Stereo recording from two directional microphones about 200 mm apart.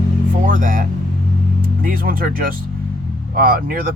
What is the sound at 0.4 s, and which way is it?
Vehicle, 45° right (ahead or behind).